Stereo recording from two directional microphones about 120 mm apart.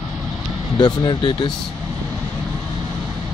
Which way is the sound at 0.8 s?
40° left (ahead or behind).